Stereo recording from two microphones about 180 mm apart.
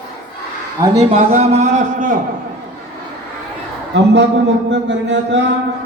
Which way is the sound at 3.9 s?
80° right.